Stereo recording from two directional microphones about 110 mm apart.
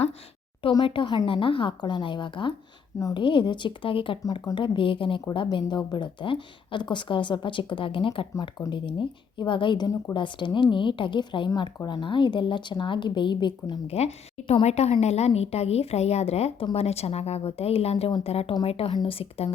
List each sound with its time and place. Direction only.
0.9 s a woman's voice: 50° left (ahead or behind)
4.2 s speech: 30° left (ahead or behind)
4.5 s a woman's voice: 45° left (ahead or behind)
13.9 s a woman's voice: 75° left (ahead or behind)